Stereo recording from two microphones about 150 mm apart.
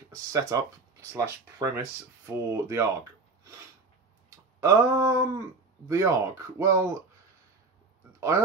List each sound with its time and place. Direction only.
0.1 s speech: 20° right (ahead or behind)
4.6 s speech: 20° right (ahead or behind)